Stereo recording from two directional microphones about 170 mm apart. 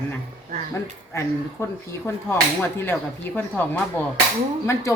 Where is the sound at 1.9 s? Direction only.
15° left (ahead or behind).